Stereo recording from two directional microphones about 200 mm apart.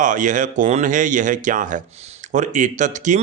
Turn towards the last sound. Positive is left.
turn(degrees=-40)  # may be behind; listen again after turning